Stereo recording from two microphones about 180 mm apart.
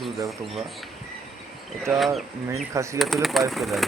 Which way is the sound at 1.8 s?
Centre (ahead or behind).